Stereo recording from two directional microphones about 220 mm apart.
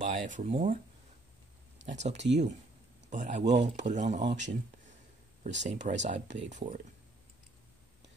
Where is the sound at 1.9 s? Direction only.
30° right (ahead or behind).